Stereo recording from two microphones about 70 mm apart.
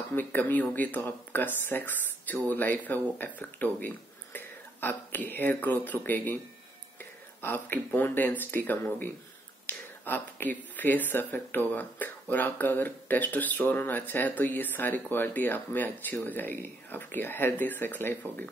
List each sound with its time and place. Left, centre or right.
0.1 s speech: left